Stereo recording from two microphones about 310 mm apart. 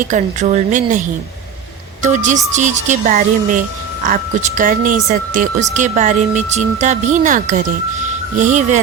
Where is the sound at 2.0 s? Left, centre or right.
Right.